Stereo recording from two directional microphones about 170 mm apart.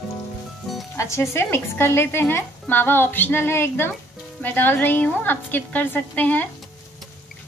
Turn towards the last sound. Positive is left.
turn(degrees=10)  # may be behind; listen again after turning